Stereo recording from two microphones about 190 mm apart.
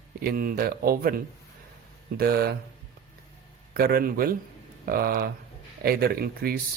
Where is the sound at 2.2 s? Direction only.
55° right (ahead or behind).